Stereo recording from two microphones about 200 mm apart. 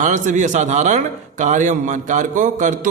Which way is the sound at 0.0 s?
40° right (ahead or behind).